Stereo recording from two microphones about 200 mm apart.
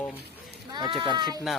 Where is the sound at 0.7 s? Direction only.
20° right (ahead or behind).